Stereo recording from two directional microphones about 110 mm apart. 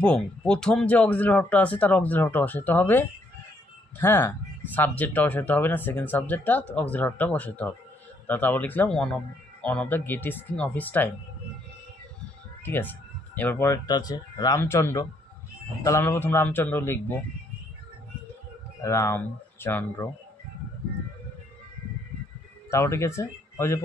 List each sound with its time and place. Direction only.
0.0 s speech: 10° left (ahead or behind)
12.6 s speech: 15° left (ahead or behind)
13.8 s speech: 35° left (ahead or behind)
14.6 s speech: 25° left (ahead or behind)
18.8 s speech: 25° left (ahead or behind)
22.7 s speech: 25° left (ahead or behind)